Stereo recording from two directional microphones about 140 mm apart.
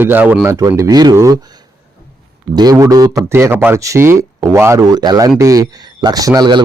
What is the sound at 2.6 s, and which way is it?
A man's voice, 25° right (ahead or behind).